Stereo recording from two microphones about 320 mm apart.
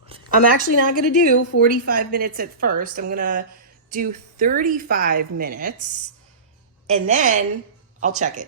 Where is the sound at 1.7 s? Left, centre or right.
Right.